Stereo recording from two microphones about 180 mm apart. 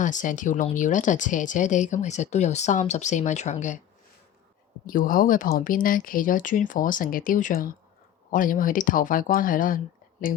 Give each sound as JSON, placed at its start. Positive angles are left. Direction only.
{"t": 0.0, "sound": "speech", "side_deg": 45}
{"t": 4.9, "sound": "speech", "side_deg": 50}